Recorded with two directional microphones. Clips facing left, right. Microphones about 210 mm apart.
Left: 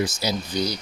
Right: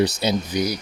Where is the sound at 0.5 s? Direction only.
15° right (ahead or behind).